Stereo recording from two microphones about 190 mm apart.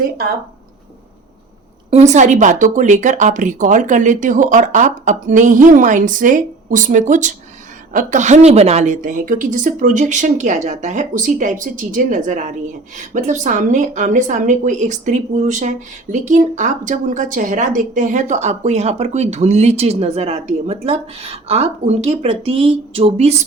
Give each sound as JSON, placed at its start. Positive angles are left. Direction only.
{"t": 1.9, "sound": "speech", "side_deg": -35}